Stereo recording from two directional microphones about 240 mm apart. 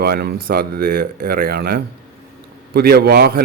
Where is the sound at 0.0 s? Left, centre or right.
Right.